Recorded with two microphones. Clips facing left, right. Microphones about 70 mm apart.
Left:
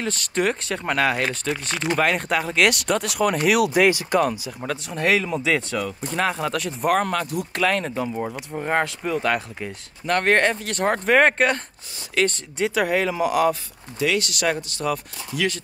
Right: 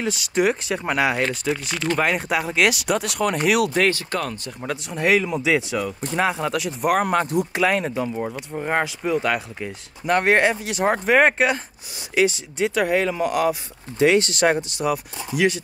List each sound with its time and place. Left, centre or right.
0.0 s speech: centre
4.6 s speech: centre
7.1 s speech: right
7.5 s speech: centre
7.9 s speech: centre
13.9 s speech: right
14.8 s speech: centre